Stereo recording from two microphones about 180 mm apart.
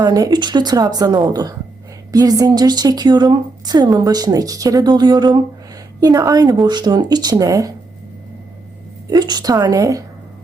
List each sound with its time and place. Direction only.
0.0 s a woman's voice: 20° right (ahead or behind)
9.0 s a woman's voice: 20° right (ahead or behind)